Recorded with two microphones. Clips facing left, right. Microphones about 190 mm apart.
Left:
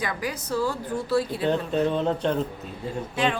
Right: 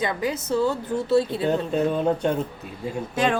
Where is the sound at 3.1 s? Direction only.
45° right (ahead or behind).